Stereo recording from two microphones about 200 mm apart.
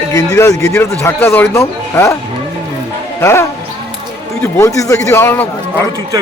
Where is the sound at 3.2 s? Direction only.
15° left (ahead or behind).